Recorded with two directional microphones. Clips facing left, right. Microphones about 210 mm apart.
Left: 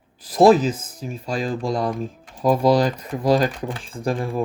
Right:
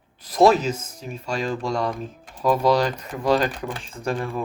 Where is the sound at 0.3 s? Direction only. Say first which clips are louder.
Left 3 dB; 35° left (ahead or behind).